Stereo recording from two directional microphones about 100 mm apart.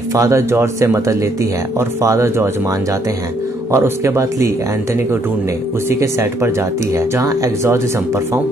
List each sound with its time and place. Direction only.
0.1 s speech: 30° right (ahead or behind)
3.7 s speech: 25° right (ahead or behind)
5.9 s speech: 25° right (ahead or behind)